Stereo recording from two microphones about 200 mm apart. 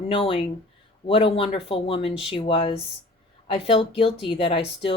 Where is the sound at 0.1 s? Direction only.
25° left (ahead or behind).